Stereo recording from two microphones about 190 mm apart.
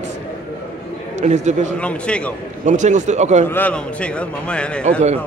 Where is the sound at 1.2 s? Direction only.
40° right (ahead or behind).